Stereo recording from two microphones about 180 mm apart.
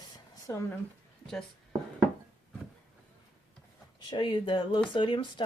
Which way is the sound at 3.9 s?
25° left (ahead or behind).